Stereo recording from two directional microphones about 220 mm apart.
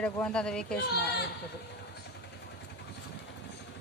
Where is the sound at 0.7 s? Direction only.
45° left (ahead or behind).